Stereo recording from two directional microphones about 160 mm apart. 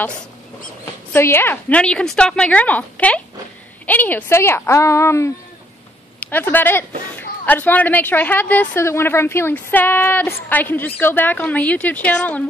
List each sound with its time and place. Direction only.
1.1 s a woman's voice: 15° left (ahead or behind)
6.3 s a woman's voice: 10° left (ahead or behind)